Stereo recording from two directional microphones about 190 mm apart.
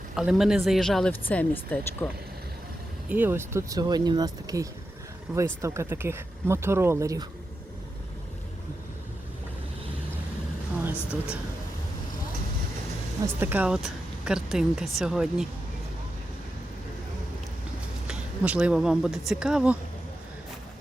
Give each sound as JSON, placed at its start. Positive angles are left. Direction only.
{"t": 0.2, "sound": "speech", "side_deg": 0}
{"t": 3.1, "sound": "speech", "side_deg": -10}
{"t": 13.2, "sound": "speech", "side_deg": -10}
{"t": 18.1, "sound": "speech", "side_deg": -5}